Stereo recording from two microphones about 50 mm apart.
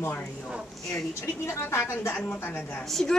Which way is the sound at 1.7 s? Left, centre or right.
Left.